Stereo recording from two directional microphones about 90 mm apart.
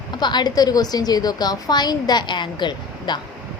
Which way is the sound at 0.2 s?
55° left (ahead or behind).